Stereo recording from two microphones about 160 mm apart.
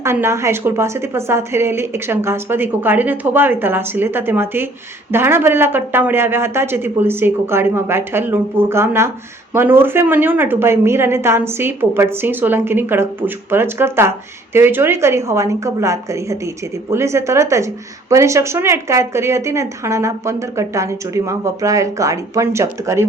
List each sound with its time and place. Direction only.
0.0 s speech: 15° right (ahead or behind)